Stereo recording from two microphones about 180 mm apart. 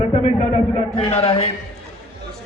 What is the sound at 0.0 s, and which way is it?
A man's voice, 35° left (ahead or behind).